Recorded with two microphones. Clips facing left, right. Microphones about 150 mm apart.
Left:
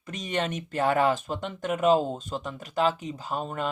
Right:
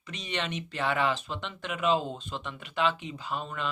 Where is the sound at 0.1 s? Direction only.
45° left (ahead or behind).